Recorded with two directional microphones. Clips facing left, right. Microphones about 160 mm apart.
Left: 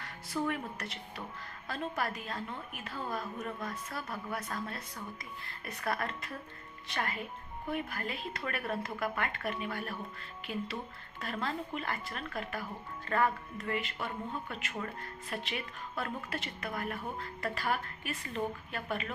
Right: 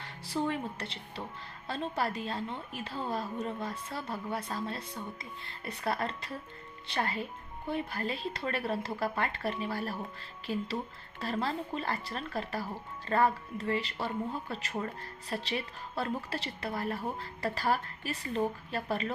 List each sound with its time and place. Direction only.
0.0 s a woman's voice: 25° right (ahead or behind)